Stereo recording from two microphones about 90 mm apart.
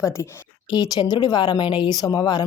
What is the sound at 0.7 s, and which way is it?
Speech, 50° left (ahead or behind).